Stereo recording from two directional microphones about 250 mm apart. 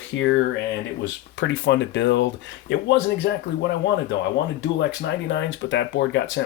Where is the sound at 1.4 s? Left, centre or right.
Left.